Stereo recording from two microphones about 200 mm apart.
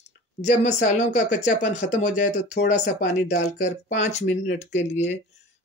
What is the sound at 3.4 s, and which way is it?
Speech, 35° left (ahead or behind).